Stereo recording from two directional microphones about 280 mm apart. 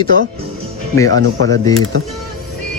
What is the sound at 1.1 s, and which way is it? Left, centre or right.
Speech, right.